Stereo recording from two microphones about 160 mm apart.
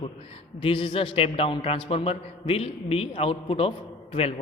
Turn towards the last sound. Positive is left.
turn(degrees=35)  # may be behind; listen again after turning